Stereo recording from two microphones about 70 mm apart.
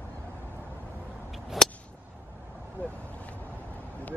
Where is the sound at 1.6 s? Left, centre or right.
Centre.